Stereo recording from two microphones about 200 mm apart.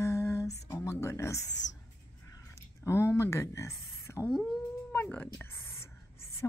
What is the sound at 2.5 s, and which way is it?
Speech, 15° left (ahead or behind).